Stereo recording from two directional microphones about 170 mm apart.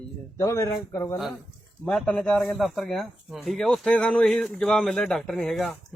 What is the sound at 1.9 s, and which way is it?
A man's voice, 5° left (ahead or behind).